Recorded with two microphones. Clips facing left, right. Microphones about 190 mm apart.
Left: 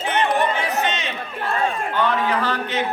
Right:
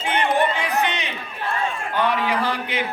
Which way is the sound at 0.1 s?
15° right (ahead or behind).